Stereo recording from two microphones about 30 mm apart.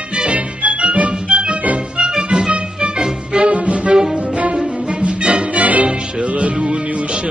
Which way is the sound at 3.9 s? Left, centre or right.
Centre.